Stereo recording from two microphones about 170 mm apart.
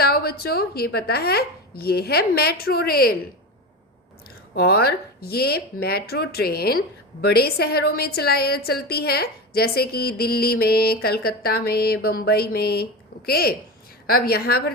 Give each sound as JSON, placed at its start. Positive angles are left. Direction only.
{"t": 0.0, "sound": "speech", "side_deg": 65}
{"t": 4.5, "sound": "speech", "side_deg": 65}